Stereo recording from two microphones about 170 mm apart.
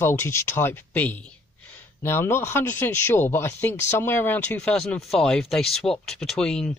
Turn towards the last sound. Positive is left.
turn(degrees=5)  # may be behind; listen again after turning